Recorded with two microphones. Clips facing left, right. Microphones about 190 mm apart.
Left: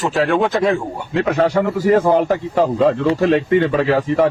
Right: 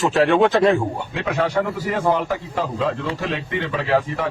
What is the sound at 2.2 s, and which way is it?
Speech, 50° left (ahead or behind).